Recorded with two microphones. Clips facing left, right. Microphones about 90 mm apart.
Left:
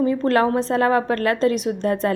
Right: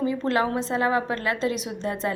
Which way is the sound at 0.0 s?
45° left (ahead or behind).